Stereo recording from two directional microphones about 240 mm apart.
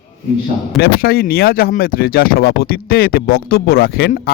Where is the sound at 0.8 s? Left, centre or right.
Left.